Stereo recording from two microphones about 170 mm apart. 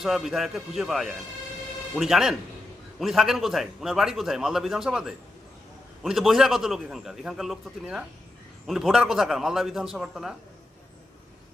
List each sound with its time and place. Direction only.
0.0 s a man's voice: centre (ahead or behind)